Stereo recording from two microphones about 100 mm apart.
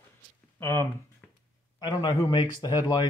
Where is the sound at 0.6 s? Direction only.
25° left (ahead or behind).